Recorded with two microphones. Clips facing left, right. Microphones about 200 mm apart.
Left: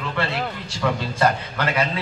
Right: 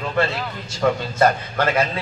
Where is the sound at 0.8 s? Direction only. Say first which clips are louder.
Right 3 dB; 45° right (ahead or behind).